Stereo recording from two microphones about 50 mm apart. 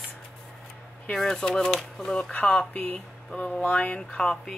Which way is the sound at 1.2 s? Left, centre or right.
Centre.